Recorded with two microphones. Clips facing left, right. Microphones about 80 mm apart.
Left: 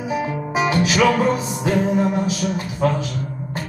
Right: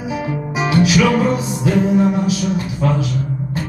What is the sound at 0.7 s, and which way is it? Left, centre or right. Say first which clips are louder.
Music: right 5 dB; left.